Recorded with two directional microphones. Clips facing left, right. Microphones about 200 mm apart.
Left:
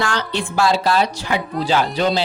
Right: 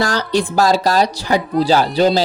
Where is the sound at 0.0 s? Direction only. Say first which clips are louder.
Right 5 dB; 40° right (ahead or behind).